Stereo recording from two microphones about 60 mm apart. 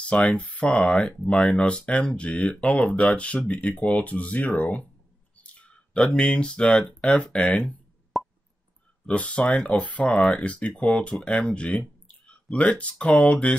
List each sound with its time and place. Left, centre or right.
0.0 s speech: left
8.1 s plop: centre
9.0 s speech: centre